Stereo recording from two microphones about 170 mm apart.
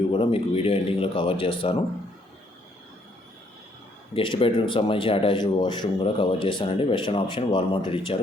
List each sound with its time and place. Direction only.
0.1 s speech: 30° left (ahead or behind)
4.1 s speech: 30° left (ahead or behind)